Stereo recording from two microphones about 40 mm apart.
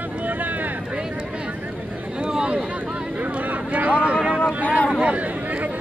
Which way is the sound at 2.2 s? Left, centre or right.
Right.